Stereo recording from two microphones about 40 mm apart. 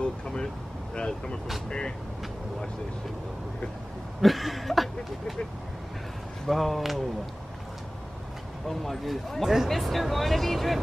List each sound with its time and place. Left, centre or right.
0.0 s vehicle: centre
0.9 s speech: left
4.2 s a sound: centre
6.4 s speech: centre
8.6 s speech: centre